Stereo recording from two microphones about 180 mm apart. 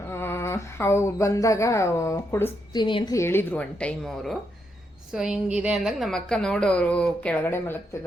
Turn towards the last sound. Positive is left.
turn(degrees=10)  # may be behind; listen again after turning